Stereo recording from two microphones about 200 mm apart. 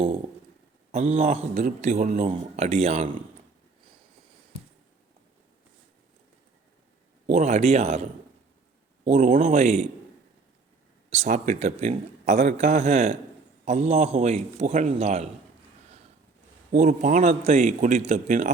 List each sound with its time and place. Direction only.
0.9 s a man's voice: 35° right (ahead or behind)
7.3 s a man's voice: 35° right (ahead or behind)
9.0 s a man's voice: 35° right (ahead or behind)
11.1 s a man's voice: 35° right (ahead or behind)
16.7 s a man's voice: 40° right (ahead or behind)